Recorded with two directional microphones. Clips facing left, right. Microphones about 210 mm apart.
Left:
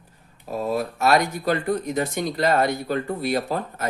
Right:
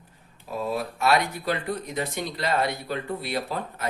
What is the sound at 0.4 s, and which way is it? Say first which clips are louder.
Speech: left 4 dB; 45° left (ahead or behind).